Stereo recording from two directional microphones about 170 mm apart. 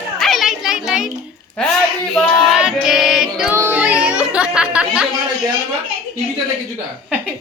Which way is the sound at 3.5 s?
10° right (ahead or behind).